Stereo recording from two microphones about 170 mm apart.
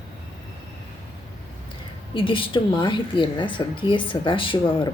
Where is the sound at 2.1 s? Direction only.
30° left (ahead or behind).